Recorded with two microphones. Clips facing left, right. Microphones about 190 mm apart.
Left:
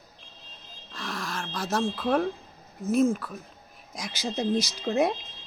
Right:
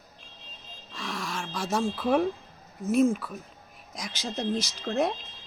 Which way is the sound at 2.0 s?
5° right (ahead or behind).